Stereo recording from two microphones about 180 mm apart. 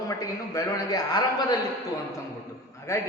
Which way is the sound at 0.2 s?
20° left (ahead or behind).